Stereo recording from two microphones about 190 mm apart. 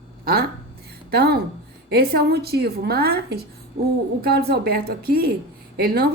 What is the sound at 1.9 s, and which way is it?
A woman's voice, 55° right (ahead or behind).